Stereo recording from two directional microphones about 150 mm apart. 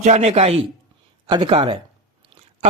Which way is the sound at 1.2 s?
30° right (ahead or behind).